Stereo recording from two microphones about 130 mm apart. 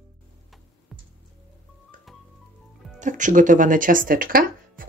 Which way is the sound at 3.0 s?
75° right (ahead or behind).